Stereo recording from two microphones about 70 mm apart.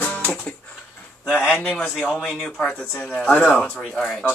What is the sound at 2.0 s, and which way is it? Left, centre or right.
Speech, centre.